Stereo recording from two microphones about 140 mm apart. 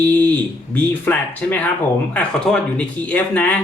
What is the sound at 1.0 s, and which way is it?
Speech, 15° left (ahead or behind).